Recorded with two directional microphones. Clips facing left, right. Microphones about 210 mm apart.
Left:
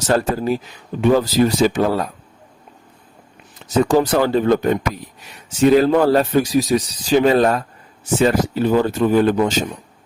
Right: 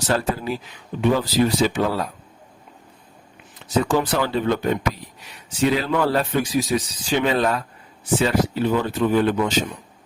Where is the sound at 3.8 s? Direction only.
45° left (ahead or behind).